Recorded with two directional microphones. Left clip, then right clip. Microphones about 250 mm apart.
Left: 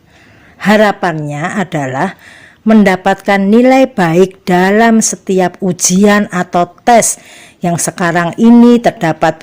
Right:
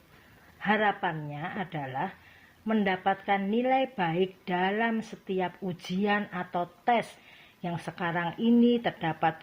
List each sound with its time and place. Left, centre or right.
0.6 s speech: left